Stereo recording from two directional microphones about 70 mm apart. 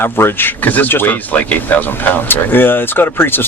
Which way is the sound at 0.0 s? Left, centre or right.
Left.